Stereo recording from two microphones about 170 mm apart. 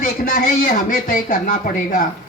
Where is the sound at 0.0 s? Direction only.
50° left (ahead or behind).